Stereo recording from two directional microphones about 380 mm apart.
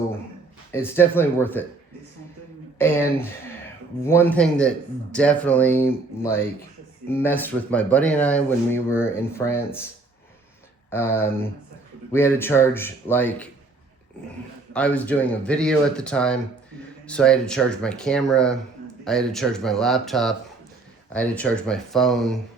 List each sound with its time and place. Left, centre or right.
0.7 s speech: centre
2.7 s speech: centre
10.9 s speech: centre
14.7 s speech: centre